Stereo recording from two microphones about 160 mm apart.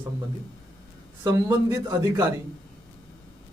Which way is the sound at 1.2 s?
20° right (ahead or behind).